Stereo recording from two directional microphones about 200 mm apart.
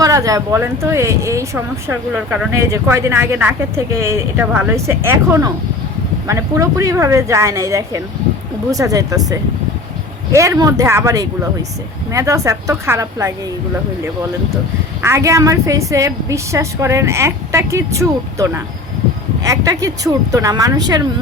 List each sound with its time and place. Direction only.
0.0 s speech: 15° right (ahead or behind)
2.5 s speech: 15° right (ahead or behind)
10.3 s speech: 15° right (ahead or behind)
15.0 s speech: 15° right (ahead or behind)